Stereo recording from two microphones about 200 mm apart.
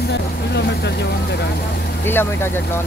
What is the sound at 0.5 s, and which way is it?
Speech, 55° left (ahead or behind).